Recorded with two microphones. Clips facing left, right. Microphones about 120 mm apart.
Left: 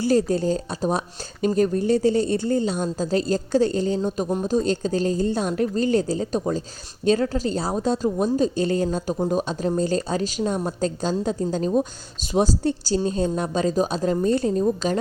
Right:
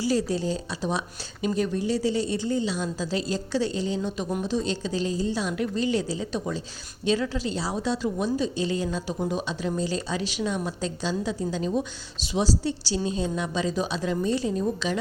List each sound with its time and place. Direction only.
0.0 s a woman's voice: 50° left (ahead or behind)